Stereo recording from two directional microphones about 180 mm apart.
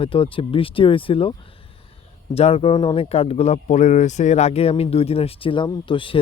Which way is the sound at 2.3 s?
35° left (ahead or behind).